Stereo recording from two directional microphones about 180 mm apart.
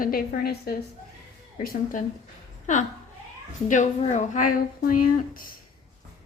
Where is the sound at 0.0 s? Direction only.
55° left (ahead or behind).